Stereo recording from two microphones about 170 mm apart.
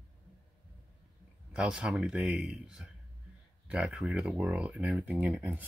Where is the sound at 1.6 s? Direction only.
5° right (ahead or behind).